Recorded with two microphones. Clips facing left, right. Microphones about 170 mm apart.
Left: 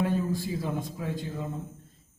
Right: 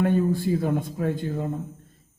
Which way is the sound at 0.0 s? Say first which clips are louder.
Right 6 dB; 60° right (ahead or behind).